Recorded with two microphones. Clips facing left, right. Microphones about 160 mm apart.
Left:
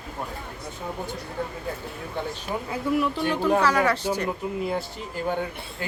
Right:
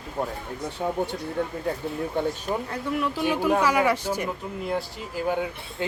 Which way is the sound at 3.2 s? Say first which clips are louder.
Even; 10° right (ahead or behind).